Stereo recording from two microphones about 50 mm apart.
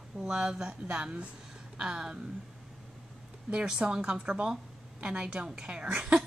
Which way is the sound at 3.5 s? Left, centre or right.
Right.